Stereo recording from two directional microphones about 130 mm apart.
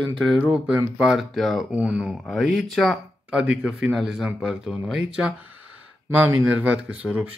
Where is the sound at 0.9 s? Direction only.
Centre (ahead or behind).